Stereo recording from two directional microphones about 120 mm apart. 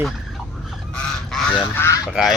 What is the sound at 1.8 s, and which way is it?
Honk, 25° left (ahead or behind).